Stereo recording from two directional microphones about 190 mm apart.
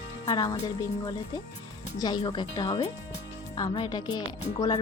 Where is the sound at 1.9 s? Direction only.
20° left (ahead or behind).